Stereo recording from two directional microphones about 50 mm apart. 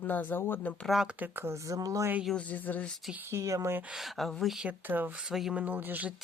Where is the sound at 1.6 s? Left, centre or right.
Right.